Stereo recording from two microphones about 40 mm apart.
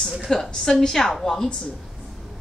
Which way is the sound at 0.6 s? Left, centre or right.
Centre.